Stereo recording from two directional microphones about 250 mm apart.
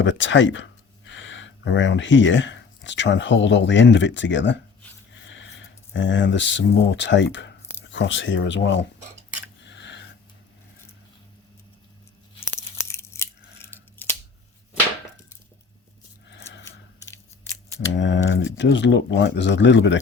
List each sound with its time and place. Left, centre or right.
0.0 s speech: left
9.6 s a sound: left
12.5 s tearing: centre
16.3 s a sound: left
16.6 s scissors: centre
18.0 s speech: left